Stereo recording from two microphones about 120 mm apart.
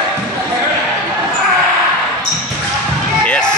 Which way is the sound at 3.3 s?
5° left (ahead or behind).